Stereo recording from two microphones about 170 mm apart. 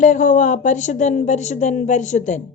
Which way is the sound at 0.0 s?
50° left (ahead or behind).